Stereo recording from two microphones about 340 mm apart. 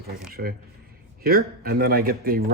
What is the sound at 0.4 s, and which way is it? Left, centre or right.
Speech, right.